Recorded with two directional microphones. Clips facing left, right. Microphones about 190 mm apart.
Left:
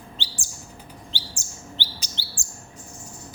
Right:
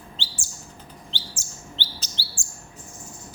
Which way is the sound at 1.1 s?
15° left (ahead or behind).